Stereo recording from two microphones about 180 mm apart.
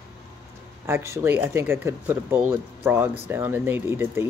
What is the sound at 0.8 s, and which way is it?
Speech, 15° right (ahead or behind).